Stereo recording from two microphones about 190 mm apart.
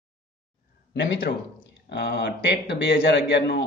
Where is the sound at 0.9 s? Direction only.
65° left (ahead or behind).